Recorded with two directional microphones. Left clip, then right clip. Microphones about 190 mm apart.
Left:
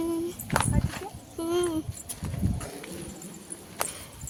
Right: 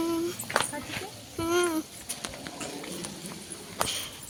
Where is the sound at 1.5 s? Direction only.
15° left (ahead or behind).